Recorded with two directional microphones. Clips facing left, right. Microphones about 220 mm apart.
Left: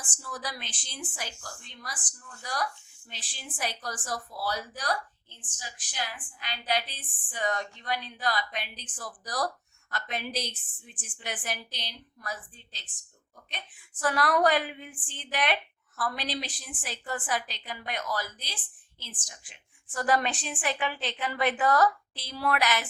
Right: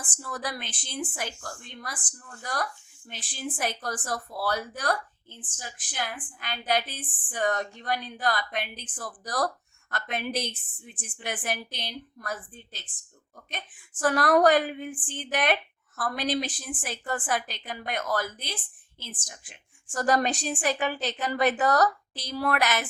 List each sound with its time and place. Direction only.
0.0 s a woman's voice: 55° right (ahead or behind)